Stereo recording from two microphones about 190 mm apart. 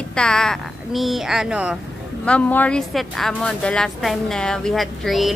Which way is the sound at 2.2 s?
10° left (ahead or behind).